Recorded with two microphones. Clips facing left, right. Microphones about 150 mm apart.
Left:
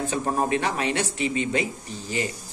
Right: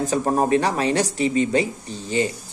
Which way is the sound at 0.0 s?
40° right (ahead or behind).